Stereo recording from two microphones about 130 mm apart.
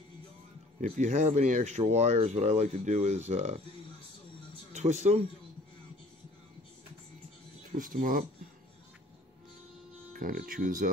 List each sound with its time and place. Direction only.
0.7 s speech: 70° right (ahead or behind)
4.7 s speech: 60° right (ahead or behind)
7.7 s speech: 90° right
10.1 s speech: 90° right